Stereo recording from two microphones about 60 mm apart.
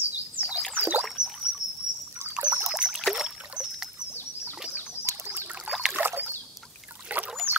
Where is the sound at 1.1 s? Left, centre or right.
Centre.